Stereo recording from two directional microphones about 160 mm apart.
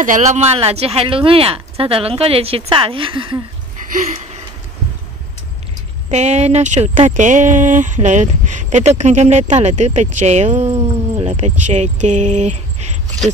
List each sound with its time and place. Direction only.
0.0 s speech: 50° right (ahead or behind); by 3.4 s 30° right (ahead or behind)
6.0 s speech: 45° right (ahead or behind)